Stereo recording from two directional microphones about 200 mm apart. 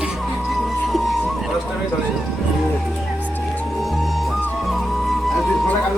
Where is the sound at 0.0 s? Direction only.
Centre (ahead or behind).